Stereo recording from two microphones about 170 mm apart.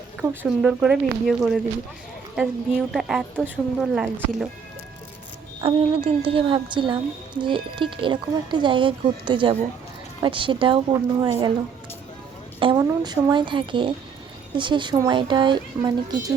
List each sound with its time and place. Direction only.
0.2 s speech: 5° right (ahead or behind)
5.5 s speech: 30° right (ahead or behind)
12.5 s a woman's voice: 30° right (ahead or behind)